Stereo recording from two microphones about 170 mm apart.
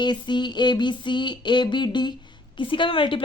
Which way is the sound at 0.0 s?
25° left (ahead or behind).